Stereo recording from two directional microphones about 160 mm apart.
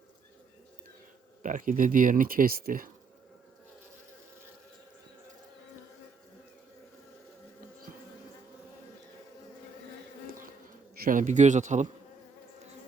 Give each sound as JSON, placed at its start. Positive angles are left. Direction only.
{"t": 1.4, "sound": "speech", "side_deg": -55}
{"t": 10.2, "sound": "bee", "side_deg": -60}
{"t": 10.9, "sound": "a man's voice", "side_deg": -60}